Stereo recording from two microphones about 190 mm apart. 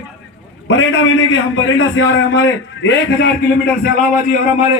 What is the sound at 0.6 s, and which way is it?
A man's voice, 90° left.